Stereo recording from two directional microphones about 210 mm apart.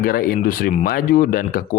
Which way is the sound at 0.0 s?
45° left (ahead or behind).